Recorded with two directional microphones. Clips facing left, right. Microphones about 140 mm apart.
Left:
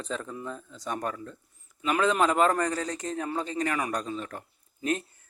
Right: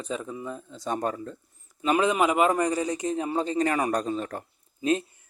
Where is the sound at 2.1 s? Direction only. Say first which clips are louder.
Right 1 dB; 10° right (ahead or behind).